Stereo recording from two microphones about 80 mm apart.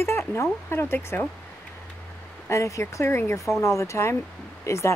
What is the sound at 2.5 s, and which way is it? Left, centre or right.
Speech, left.